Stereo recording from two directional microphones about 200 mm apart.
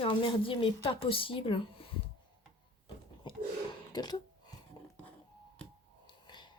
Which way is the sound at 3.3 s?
20° left (ahead or behind).